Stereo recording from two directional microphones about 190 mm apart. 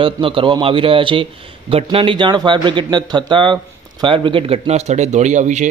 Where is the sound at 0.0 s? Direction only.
25° right (ahead or behind).